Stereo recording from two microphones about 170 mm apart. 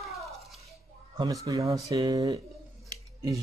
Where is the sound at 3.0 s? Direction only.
20° right (ahead or behind).